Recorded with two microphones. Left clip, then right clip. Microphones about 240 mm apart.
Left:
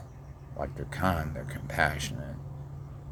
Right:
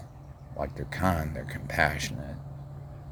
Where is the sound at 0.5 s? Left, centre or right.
Right.